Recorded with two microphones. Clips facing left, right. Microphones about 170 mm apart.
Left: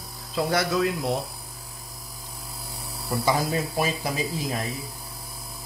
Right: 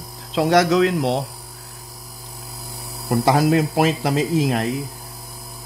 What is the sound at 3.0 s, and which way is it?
Speech, 80° right.